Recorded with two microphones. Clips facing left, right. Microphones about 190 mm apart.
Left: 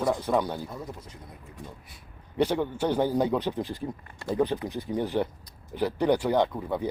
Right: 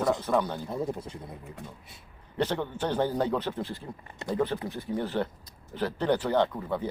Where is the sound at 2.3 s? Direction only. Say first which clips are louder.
Left 4 dB; 10° left (ahead or behind).